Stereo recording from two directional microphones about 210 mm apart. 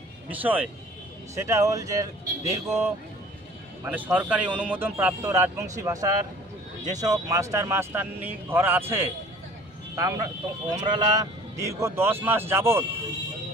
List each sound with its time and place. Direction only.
0.3 s a man's voice: 10° right (ahead or behind)